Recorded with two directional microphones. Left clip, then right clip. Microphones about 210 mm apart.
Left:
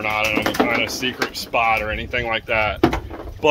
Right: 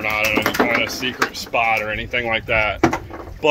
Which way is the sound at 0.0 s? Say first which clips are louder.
Right 1 dB; 5° right (ahead or behind).